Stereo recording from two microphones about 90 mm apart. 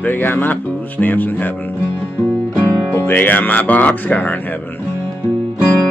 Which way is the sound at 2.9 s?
25° left (ahead or behind).